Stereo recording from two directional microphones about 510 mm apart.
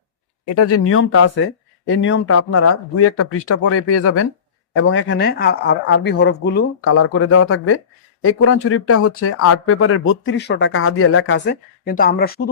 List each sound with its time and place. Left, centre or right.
0.4 s speech: left